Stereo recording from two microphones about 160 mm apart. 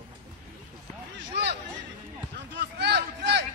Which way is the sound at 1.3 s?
90° right.